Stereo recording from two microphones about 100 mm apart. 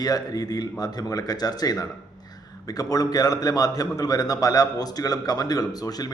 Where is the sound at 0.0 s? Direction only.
40° left (ahead or behind).